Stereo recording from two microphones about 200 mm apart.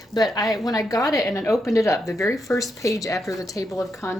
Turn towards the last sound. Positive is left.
turn(degrees=15)  # may be behind; listen again after turning